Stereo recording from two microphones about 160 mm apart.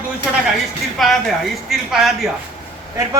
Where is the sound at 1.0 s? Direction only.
Centre (ahead or behind).